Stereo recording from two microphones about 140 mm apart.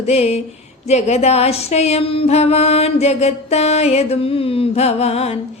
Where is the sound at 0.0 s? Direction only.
50° left (ahead or behind).